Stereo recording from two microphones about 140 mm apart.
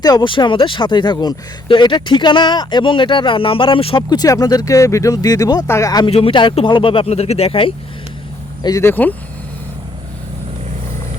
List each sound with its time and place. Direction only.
0.0 s speech: 30° left (ahead or behind)
4.1 s speech: 25° left (ahead or behind)
6.1 s speech: 45° left (ahead or behind)
8.6 s speech: 20° left (ahead or behind)